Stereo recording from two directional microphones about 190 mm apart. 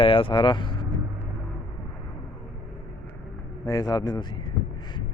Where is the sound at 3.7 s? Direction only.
20° left (ahead or behind).